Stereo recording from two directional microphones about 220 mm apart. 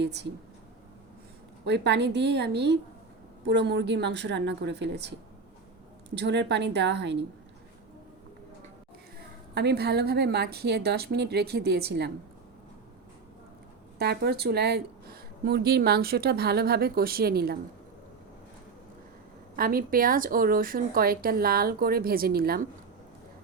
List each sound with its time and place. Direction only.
0.0 s a woman's voice: 50° right (ahead or behind)
1.6 s a woman's voice: 50° right (ahead or behind)
6.1 s a woman's voice: 50° right (ahead or behind)
9.6 s a woman's voice: 50° right (ahead or behind)
14.0 s a woman's voice: 50° right (ahead or behind)
19.5 s a woman's voice: 40° right (ahead or behind)